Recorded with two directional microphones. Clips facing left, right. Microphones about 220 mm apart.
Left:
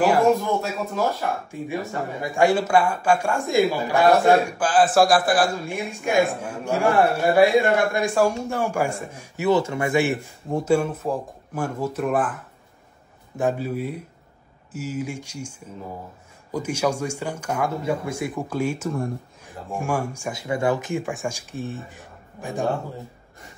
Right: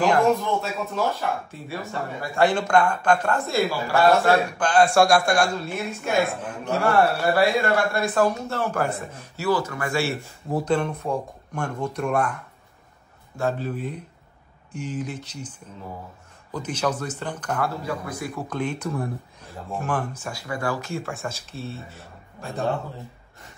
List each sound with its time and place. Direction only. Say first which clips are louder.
0.0 s speech: left 2 dB; 5° left (ahead or behind)
9.5 s speech: left 4 dB; 25° left (ahead or behind)
10.5 s speech: left 2 dB; 5° left (ahead or behind)
16.5 s speech: left 3 dB; 10° left (ahead or behind)
17.6 s speech: left 4 dB; 25° left (ahead or behind)
18.5 s speech: left 1 dB; 10° left (ahead or behind)
19.4 s speech: left 1 dB; 15° left (ahead or behind)